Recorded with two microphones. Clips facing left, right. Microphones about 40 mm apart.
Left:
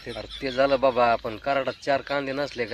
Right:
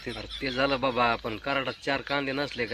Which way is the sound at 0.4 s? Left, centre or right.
Right.